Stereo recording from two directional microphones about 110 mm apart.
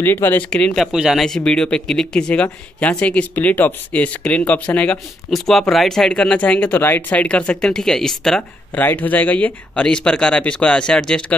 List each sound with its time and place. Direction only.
0.0 s speech: 20° left (ahead or behind)
0.9 s speech: 5° right (ahead or behind)
1.2 s speech: 5° left (ahead or behind)
8.7 s speech: 15° left (ahead or behind)